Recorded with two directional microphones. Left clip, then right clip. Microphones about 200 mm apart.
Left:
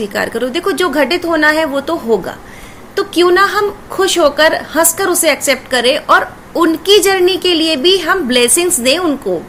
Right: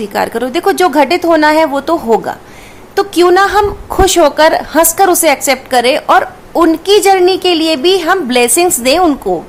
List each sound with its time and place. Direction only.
0.0 s a woman's voice: 15° right (ahead or behind)